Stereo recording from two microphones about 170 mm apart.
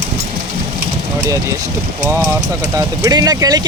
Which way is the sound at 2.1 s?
15° right (ahead or behind).